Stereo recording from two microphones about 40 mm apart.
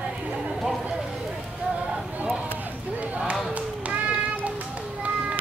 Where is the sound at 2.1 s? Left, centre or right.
Right.